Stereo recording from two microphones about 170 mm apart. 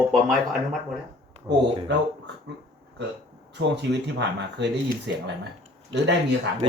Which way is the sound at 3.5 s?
90° right.